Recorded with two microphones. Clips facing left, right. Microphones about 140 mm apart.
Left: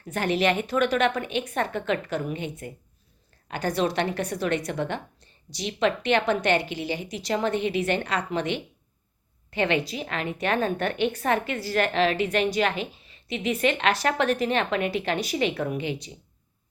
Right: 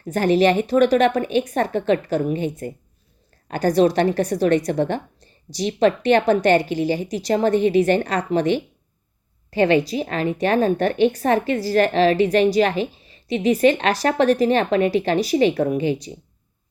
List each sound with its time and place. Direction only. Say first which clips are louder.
0.0 s a woman's voice: right 7 dB; 40° right (ahead or behind)